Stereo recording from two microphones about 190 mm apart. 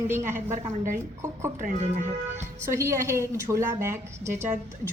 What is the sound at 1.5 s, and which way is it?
Speech, 40° right (ahead or behind).